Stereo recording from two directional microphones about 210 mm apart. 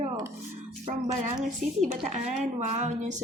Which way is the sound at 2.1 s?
35° right (ahead or behind).